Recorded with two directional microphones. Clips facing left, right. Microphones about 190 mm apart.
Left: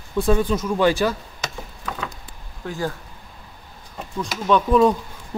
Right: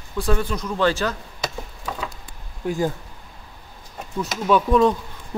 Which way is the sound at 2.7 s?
15° right (ahead or behind).